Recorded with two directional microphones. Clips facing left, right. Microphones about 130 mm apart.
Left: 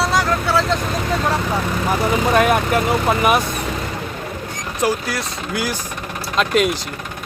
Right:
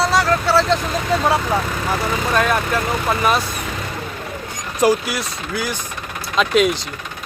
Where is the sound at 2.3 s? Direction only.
15° left (ahead or behind).